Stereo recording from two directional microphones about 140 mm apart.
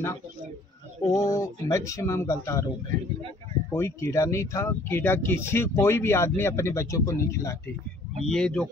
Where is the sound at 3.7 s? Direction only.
20° left (ahead or behind).